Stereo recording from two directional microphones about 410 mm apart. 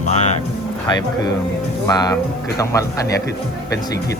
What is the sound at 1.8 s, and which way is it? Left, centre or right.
Speech, centre.